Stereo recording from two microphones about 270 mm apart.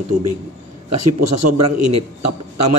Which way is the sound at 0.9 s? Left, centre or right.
Right.